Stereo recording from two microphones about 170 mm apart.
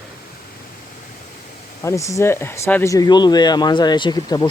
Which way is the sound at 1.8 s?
15° left (ahead or behind).